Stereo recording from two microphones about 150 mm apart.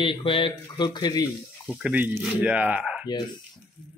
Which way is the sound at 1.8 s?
10° right (ahead or behind).